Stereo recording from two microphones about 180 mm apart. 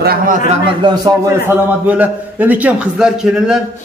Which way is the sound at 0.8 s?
20° right (ahead or behind).